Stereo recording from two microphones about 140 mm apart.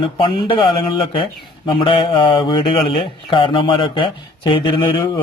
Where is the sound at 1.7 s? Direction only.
40° left (ahead or behind).